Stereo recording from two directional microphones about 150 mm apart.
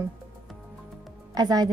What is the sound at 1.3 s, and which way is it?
Speech, 25° right (ahead or behind).